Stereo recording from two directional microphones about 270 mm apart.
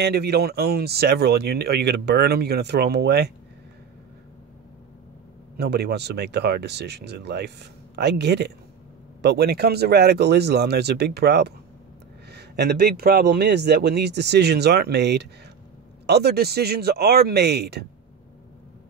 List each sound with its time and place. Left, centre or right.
0.0 s speech: right
5.6 s speech: right